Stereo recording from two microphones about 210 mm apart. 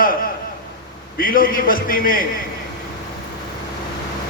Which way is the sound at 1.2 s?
40° left (ahead or behind).